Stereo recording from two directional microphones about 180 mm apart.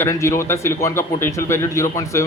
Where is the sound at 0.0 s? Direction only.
15° left (ahead or behind).